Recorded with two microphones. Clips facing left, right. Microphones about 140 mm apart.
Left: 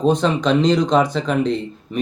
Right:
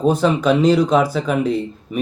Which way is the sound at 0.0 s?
10° right (ahead or behind).